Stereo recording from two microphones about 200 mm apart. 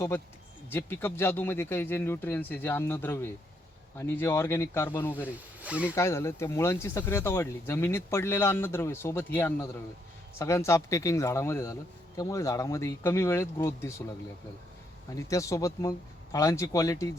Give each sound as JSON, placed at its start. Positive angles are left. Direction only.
{"t": 0.7, "sound": "speech", "side_deg": 10}
{"t": 5.3, "sound": "speech", "side_deg": -5}
{"t": 5.9, "sound": "speech", "side_deg": 15}
{"t": 15.1, "sound": "speech", "side_deg": 15}